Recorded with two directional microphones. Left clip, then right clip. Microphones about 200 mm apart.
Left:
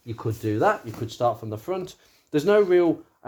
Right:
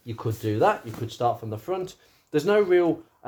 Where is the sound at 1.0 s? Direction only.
35° left (ahead or behind).